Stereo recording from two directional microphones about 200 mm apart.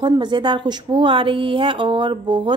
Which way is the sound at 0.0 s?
20° right (ahead or behind).